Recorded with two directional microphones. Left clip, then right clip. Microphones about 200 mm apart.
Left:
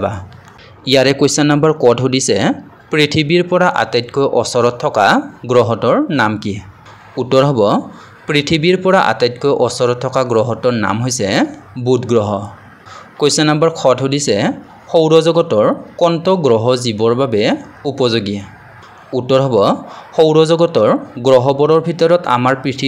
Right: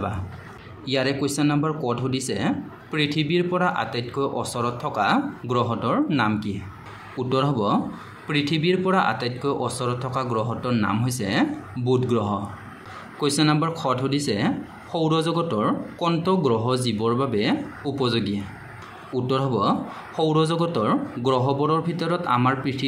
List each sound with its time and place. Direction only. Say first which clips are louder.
0.8 s speech: left 13 dB; 40° left (ahead or behind)